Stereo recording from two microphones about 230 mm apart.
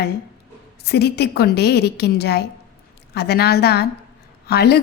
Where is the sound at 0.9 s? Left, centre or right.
Left.